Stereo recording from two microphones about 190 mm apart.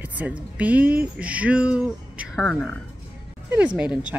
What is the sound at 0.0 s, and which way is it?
Speech, 10° right (ahead or behind).